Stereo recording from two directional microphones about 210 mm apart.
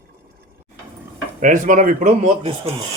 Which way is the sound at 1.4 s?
40° right (ahead or behind).